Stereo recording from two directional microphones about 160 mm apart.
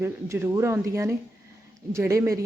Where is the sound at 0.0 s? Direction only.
15° right (ahead or behind).